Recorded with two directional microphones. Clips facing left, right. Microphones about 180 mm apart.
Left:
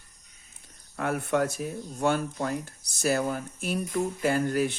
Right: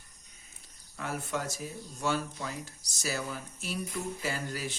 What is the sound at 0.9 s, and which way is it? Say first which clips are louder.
Speech: left 9 dB; 60° left (ahead or behind).